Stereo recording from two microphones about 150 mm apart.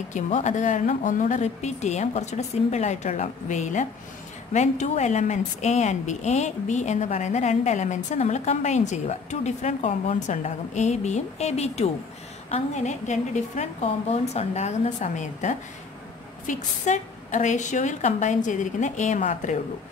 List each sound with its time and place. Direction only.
0.1 s a woman's voice: 50° left (ahead or behind)
10.1 s a woman's voice: 55° left (ahead or behind)